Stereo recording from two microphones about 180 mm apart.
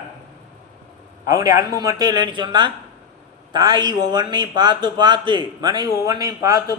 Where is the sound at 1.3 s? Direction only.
20° right (ahead or behind).